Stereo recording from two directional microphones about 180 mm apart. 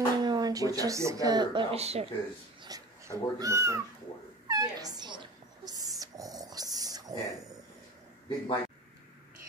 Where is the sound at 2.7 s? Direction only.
20° right (ahead or behind).